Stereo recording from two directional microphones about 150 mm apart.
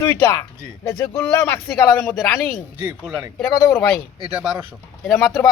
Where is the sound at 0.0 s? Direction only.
15° left (ahead or behind).